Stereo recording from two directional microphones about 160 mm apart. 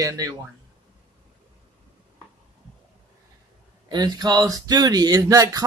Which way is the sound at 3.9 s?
25° right (ahead or behind).